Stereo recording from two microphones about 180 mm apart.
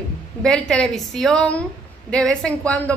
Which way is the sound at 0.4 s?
5° left (ahead or behind).